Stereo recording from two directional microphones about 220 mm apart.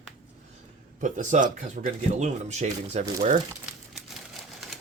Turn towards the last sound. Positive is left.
turn(degrees=-30)  # may be behind; listen again after turning